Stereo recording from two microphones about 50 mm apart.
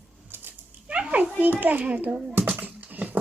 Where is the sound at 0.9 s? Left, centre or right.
Right.